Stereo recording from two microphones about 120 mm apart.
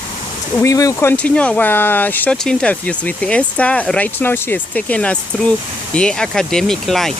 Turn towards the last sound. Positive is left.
turn(degrees=0)  # may be behind; listen again after turning